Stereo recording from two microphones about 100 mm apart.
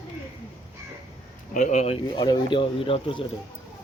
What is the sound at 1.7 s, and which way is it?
Speech, 90° left.